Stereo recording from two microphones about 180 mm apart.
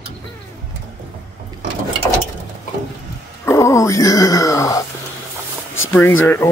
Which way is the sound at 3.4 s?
15° left (ahead or behind).